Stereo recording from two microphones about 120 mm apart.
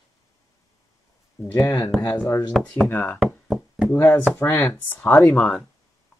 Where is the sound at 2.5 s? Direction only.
5° left (ahead or behind).